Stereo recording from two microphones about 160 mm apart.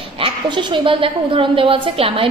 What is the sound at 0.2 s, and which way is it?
A woman's voice, 30° right (ahead or behind).